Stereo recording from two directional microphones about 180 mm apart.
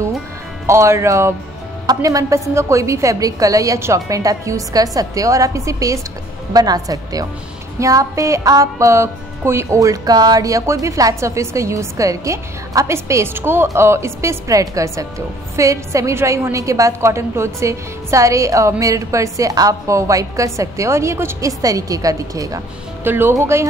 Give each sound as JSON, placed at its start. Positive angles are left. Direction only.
{"t": 0.7, "sound": "music", "side_deg": -15}
{"t": 6.5, "sound": "a woman's voice", "side_deg": -20}
{"t": 7.8, "sound": "music", "side_deg": -20}